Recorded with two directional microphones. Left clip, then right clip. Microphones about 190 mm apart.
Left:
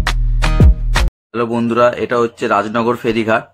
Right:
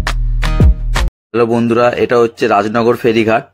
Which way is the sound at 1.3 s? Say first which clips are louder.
Right 9 dB; 25° right (ahead or behind).